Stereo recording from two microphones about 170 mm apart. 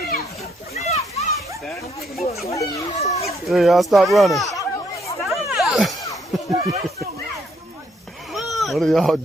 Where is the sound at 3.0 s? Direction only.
40° left (ahead or behind).